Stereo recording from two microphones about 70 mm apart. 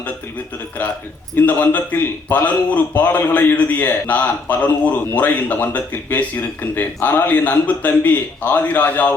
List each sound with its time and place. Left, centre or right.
1.4 s a man's voice: left